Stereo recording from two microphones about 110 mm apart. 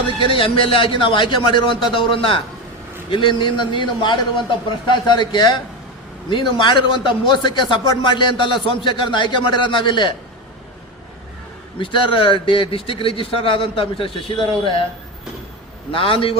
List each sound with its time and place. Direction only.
0.2 s a man's voice: 50° left (ahead or behind)
11.8 s a man's voice: 50° left (ahead or behind)
15.9 s a man's voice: 55° left (ahead or behind)